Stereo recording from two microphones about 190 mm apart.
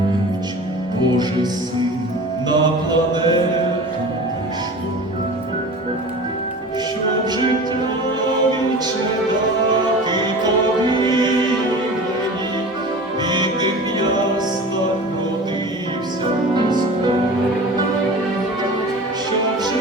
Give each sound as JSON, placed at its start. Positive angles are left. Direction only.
{"t": 1.1, "sound": "music", "side_deg": -20}
{"t": 2.5, "sound": "music", "side_deg": -25}
{"t": 13.2, "sound": "music", "side_deg": -25}